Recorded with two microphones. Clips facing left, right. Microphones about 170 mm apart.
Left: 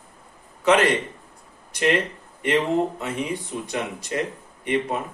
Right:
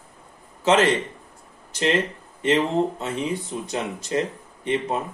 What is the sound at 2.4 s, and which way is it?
Speech, 25° right (ahead or behind).